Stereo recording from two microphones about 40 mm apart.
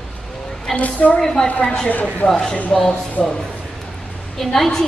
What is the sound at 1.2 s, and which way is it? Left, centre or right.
Speech, centre.